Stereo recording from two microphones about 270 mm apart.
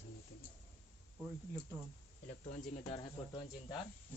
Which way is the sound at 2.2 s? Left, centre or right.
Left.